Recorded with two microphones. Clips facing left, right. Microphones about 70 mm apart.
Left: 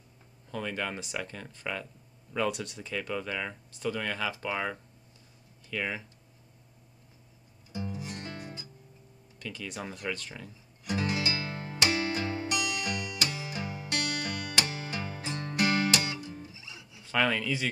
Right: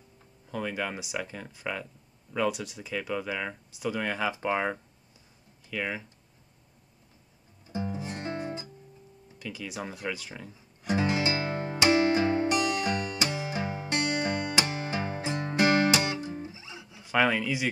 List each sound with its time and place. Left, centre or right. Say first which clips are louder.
0.5 s speech: right 2 dB; centre; by 4.7 s right
5.7 s speech: right 1 dB; centre
7.7 s music: right 4 dB; right
9.4 s speech: right 2 dB; centre
10.8 s music: right 4 dB; right
17.0 s speech: right 3 dB; centre